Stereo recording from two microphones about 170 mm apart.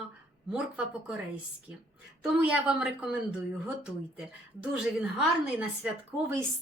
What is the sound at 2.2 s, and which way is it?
A woman's voice, 5° right (ahead or behind).